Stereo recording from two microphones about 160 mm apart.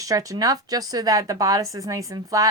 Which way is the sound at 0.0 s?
20° right (ahead or behind).